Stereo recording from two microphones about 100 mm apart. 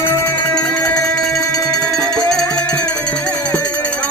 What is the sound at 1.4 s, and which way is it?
Music, 35° left (ahead or behind).